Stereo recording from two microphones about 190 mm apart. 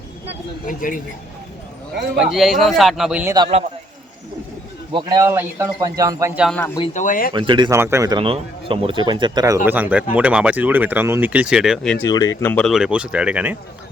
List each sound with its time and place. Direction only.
0.7 s speech: 45° left (ahead or behind)
2.1 s a man's voice: centre (ahead or behind)
4.9 s speech: 25° right (ahead or behind)
6.7 s speech: 30° left (ahead or behind)
7.0 s speech: 45° left (ahead or behind)
7.3 s speech: 25° right (ahead or behind)
7.8 s speech: 15° right (ahead or behind)
9.6 s speech: 10° right (ahead or behind)
12.0 s speech: 20° left (ahead or behind)
12.4 s a man's voice: 10° left (ahead or behind); by 13.6 s 5° right (ahead or behind)